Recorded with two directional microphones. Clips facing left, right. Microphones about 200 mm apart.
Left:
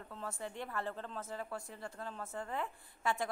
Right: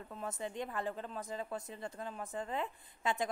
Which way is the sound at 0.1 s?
20° right (ahead or behind).